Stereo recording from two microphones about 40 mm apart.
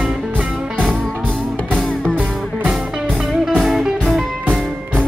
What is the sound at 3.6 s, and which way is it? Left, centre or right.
Music, centre.